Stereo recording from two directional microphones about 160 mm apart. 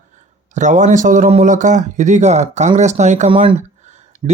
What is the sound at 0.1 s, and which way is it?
Speech, 50° right (ahead or behind).